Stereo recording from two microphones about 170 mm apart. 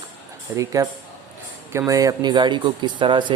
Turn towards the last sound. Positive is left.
turn(degrees=-30)  # may be behind; listen again after turning